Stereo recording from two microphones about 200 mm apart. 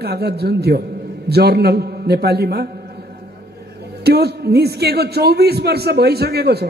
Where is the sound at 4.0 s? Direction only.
55° right (ahead or behind).